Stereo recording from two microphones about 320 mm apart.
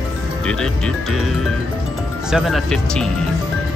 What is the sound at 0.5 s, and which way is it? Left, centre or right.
Speech, centre.